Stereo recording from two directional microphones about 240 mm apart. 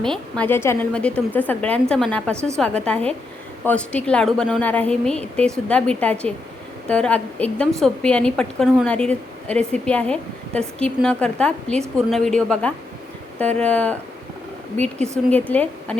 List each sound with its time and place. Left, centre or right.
0.0 s a woman's voice: centre
15.3 s a woman's voice: centre